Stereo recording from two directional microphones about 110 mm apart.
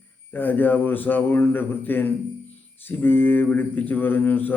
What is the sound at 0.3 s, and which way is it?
Speech, 15° left (ahead or behind).